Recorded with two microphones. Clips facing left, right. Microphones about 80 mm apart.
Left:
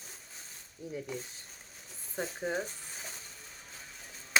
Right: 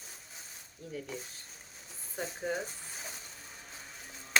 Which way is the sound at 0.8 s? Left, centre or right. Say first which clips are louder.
Left 2 dB; centre.